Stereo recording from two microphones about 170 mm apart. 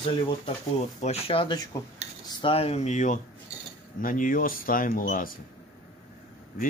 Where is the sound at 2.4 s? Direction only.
35° left (ahead or behind); by 5.3 s 55° left (ahead or behind).